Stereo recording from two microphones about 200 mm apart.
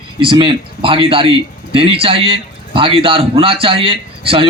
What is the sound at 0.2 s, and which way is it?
A man's voice, 25° right (ahead or behind).